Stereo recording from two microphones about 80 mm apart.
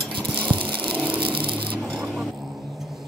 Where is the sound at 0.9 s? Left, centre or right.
Centre.